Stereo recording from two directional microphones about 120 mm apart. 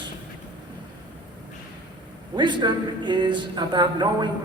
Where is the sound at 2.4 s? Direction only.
40° right (ahead or behind).